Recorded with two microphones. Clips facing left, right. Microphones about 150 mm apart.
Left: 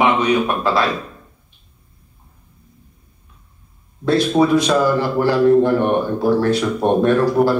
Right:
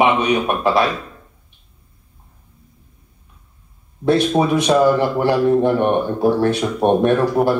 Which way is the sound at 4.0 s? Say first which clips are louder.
Even; 15° right (ahead or behind).